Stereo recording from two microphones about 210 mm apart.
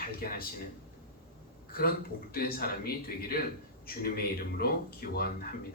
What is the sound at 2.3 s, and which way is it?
A man's voice, 45° left (ahead or behind).